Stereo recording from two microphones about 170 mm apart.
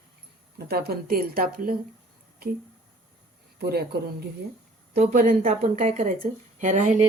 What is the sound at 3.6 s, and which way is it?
Speech, 70° right (ahead or behind).